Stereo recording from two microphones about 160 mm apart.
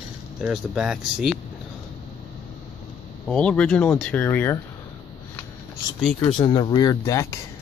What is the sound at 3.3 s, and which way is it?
Speech, 5° left (ahead or behind).